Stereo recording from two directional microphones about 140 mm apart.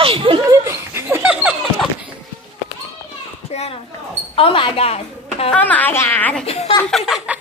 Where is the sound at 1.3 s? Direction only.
5° right (ahead or behind).